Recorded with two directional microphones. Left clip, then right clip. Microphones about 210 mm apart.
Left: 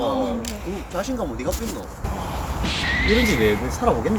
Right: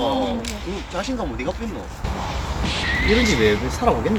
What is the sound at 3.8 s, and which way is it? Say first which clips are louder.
Speech: right 1 dB; 15° right (ahead or behind).